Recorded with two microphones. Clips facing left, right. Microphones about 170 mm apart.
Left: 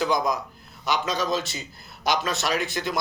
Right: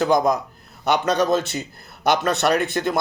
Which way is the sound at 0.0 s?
50° right (ahead or behind).